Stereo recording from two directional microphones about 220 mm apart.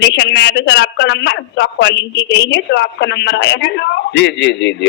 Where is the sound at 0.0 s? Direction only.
50° left (ahead or behind).